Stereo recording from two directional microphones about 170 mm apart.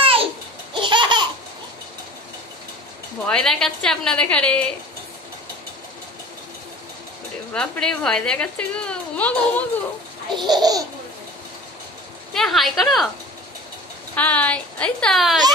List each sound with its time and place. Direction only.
0.0 s babbling: 35° right (ahead or behind)
0.7 s laughter: 30° right (ahead or behind)
3.3 s a woman's voice: 5° left (ahead or behind)
7.5 s a woman's voice: 5° left (ahead or behind)
10.3 s laughter: 25° right (ahead or behind)
12.4 s a woman's voice: centre (ahead or behind)
14.1 s a woman's voice: 10° left (ahead or behind)